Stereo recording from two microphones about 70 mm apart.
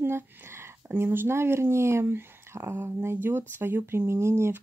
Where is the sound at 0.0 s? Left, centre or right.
Right.